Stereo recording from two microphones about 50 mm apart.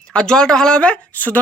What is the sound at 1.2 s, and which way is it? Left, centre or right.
Speech, left.